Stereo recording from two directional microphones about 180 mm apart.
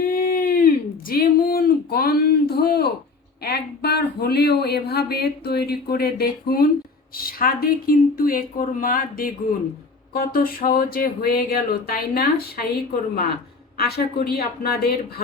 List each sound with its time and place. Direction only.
0.1 s a sound: 50° left (ahead or behind)
1.1 s speech: 55° left (ahead or behind)
13.7 s speech: 60° left (ahead or behind)